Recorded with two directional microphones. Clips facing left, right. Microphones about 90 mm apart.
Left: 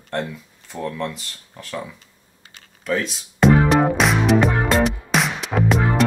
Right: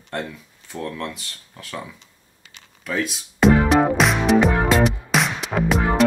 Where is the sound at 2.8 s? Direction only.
5° right (ahead or behind).